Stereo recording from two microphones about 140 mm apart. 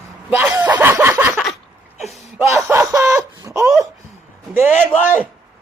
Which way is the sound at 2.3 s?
15° right (ahead or behind).